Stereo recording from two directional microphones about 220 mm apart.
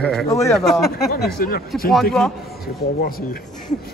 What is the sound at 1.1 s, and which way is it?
Speech, 45° left (ahead or behind).